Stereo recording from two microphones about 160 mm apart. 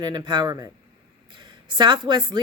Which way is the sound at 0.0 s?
25° right (ahead or behind).